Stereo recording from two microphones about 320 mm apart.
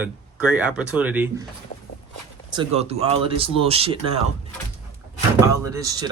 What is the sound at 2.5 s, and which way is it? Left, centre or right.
Speech, centre.